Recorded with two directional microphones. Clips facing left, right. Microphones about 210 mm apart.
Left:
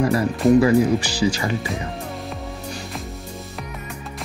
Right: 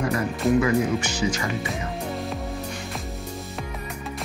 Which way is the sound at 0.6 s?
30° left (ahead or behind).